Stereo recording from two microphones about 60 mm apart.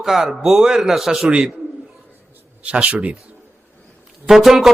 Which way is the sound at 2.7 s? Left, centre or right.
Right.